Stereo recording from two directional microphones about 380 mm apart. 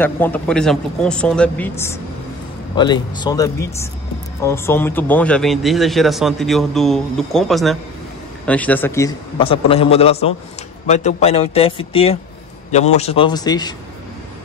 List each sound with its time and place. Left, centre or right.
0.0 s a man's voice: centre